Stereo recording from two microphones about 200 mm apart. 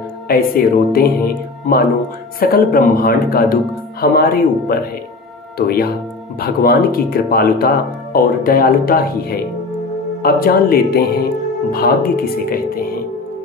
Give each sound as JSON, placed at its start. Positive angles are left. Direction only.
{"t": 0.3, "sound": "speech", "side_deg": 50}
{"t": 6.4, "sound": "speech", "side_deg": 50}